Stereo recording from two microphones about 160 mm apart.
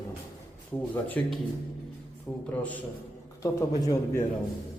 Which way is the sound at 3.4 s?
20° left (ahead or behind).